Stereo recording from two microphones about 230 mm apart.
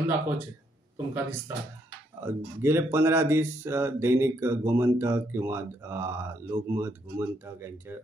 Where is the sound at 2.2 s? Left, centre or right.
Centre.